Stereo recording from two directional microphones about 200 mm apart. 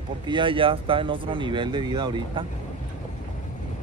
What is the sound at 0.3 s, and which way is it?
Speech, 25° right (ahead or behind).